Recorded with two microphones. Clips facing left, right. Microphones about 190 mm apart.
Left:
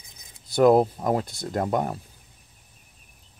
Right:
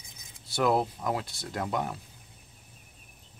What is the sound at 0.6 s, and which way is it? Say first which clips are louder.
Speech: left 9 dB; 45° left (ahead or behind).